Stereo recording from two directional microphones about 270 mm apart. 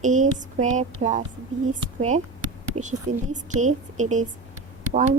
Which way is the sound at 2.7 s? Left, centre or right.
Right.